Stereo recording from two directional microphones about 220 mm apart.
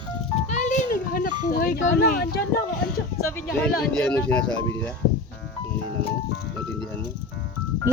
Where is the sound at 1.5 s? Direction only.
40° left (ahead or behind).